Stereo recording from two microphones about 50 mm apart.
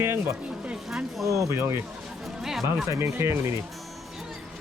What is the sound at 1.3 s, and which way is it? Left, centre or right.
Speech, right.